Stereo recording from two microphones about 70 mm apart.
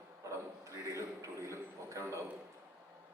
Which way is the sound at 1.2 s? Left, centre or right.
Right.